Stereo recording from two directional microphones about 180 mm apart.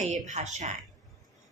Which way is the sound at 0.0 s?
40° right (ahead or behind).